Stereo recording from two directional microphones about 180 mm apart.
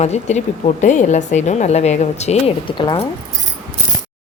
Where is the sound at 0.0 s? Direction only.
40° left (ahead or behind).